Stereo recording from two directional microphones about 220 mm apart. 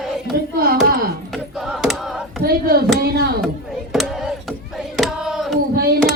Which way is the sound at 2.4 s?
45° right (ahead or behind).